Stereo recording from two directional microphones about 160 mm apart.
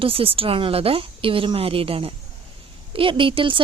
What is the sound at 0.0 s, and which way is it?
A woman's voice, 35° right (ahead or behind).